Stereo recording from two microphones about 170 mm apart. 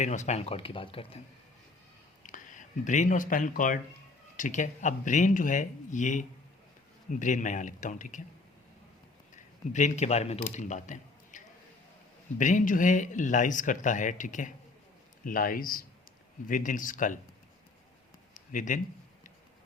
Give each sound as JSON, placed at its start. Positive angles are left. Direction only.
{"t": 0.0, "sound": "speech", "side_deg": 45}
{"t": 2.2, "sound": "speech", "side_deg": 50}
{"t": 9.7, "sound": "a man's voice", "side_deg": 45}
{"t": 18.3, "sound": "a sound", "side_deg": 50}